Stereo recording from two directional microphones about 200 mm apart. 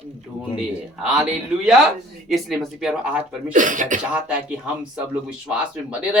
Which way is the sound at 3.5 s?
40° right (ahead or behind).